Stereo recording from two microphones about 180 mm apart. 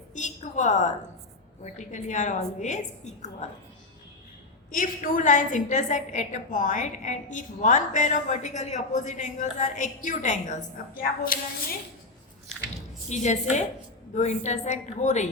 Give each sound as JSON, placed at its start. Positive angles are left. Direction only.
{"t": 0.1, "sound": "a sound", "side_deg": 40}
{"t": 1.6, "sound": "a woman's voice", "side_deg": 40}
{"t": 4.7, "sound": "a woman's voice", "side_deg": 45}
{"t": 13.1, "sound": "a woman's voice", "side_deg": 40}